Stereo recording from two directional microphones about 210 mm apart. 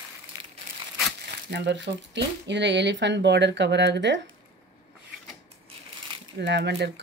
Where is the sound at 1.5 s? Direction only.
55° right (ahead or behind).